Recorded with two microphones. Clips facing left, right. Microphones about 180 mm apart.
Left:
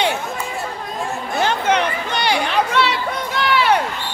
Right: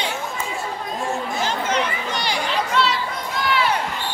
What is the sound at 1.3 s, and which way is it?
Chatter, 65° left (ahead or behind).